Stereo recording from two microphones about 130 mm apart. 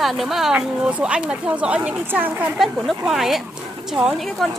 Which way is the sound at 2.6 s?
Centre (ahead or behind).